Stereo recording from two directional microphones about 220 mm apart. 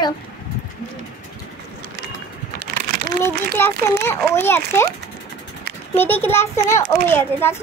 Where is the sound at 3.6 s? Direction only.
10° left (ahead or behind).